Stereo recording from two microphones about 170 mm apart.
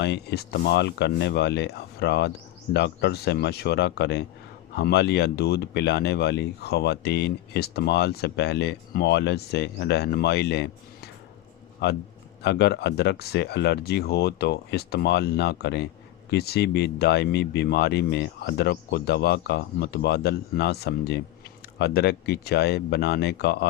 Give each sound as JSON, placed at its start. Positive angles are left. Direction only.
{"t": 0.0, "sound": "speech", "side_deg": 80}